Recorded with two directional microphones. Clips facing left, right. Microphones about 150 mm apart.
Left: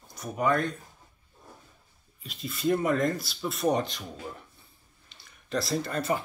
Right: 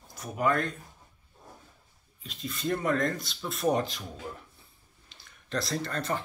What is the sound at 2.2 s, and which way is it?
Speech, 5° left (ahead or behind).